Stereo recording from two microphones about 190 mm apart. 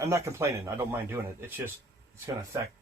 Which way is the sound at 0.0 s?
15° right (ahead or behind).